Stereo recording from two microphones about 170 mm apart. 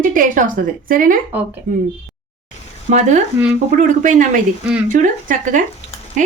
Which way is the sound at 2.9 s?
45° right (ahead or behind).